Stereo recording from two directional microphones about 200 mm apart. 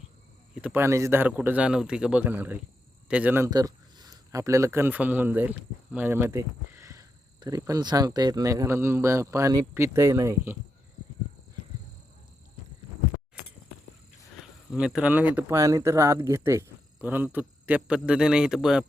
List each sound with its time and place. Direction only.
0.6 s speech: 10° right (ahead or behind)
14.7 s speech: 5° right (ahead or behind)